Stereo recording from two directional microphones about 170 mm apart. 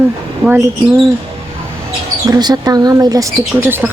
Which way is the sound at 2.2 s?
25° right (ahead or behind).